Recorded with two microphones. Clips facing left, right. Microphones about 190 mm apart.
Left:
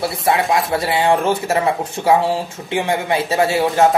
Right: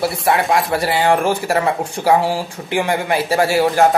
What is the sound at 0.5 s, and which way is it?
Speech, 20° left (ahead or behind).